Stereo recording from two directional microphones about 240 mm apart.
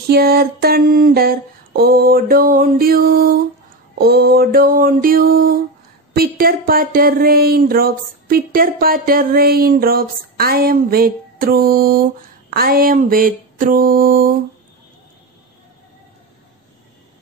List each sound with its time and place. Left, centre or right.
0.1 s speech: right